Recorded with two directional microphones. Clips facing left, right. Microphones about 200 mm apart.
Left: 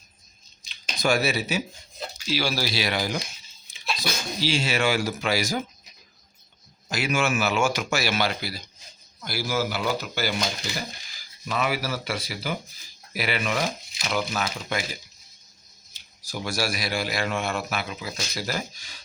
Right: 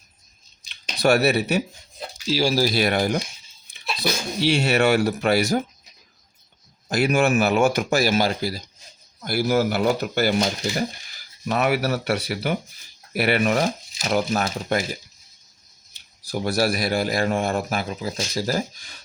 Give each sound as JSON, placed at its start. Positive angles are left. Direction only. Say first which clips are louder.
{"t": 0.7, "sound": "speech", "louder": "right 5 dB", "side_deg": -65}
{"t": 2.2, "sound": "speech", "louder": "right 6 dB", "side_deg": -40}
{"t": 4.4, "sound": "speech", "louder": "right 6 dB", "side_deg": -65}
{"t": 6.9, "sound": "speech", "louder": "right 6 dB", "side_deg": -55}
{"t": 9.2, "sound": "speech", "louder": "right 7 dB", "side_deg": -55}
{"t": 11.4, "sound": "speech", "louder": "right 6 dB", "side_deg": -60}
{"t": 16.3, "sound": "speech", "louder": "right 7 dB", "side_deg": -55}